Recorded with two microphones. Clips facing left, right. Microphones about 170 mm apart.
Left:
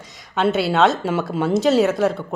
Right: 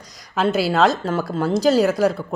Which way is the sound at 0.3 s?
Centre (ahead or behind).